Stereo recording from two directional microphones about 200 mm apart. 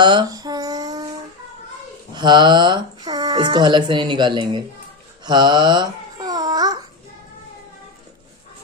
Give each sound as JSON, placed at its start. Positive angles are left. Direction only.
{"t": 0.0, "sound": "a sound", "side_deg": -25}
{"t": 2.1, "sound": "speech", "side_deg": -20}
{"t": 5.2, "sound": "babbling", "side_deg": -20}